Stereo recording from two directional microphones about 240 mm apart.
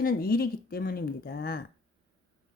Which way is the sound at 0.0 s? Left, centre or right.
Left.